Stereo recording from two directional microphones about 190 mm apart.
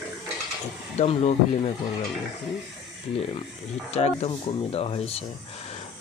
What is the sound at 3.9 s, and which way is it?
Speech, 35° left (ahead or behind).